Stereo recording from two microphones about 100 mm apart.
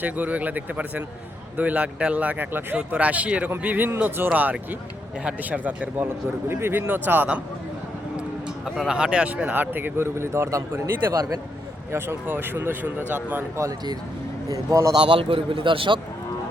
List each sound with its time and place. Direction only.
0.0 s speech: 15° right (ahead or behind)
11.1 s speech: 35° right (ahead or behind)
11.9 s speech: 25° right (ahead or behind)
13.6 s speech: 40° right (ahead or behind)
14.9 s a man's voice: 55° right (ahead or behind)